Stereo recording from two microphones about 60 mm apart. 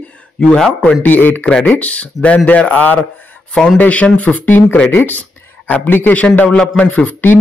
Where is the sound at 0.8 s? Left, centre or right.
Left.